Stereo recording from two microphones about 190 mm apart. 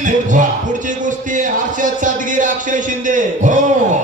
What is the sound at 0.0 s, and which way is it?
Music, 40° right (ahead or behind).